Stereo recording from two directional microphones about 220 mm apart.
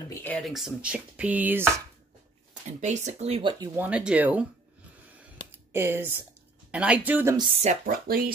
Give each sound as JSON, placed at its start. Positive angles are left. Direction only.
{"t": 0.1, "sound": "speech", "side_deg": 10}
{"t": 2.8, "sound": "speech", "side_deg": -30}
{"t": 5.7, "sound": "speech", "side_deg": -10}
{"t": 7.8, "sound": "speech", "side_deg": -40}